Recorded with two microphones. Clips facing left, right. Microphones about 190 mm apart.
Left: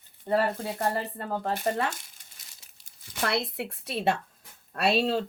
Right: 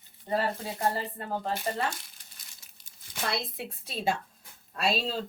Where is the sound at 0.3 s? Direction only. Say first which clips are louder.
Left 4 dB; 55° left (ahead or behind).